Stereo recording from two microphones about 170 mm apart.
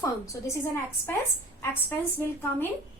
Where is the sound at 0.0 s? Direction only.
20° left (ahead or behind).